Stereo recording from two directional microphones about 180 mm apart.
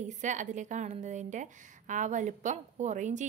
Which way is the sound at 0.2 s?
45° right (ahead or behind).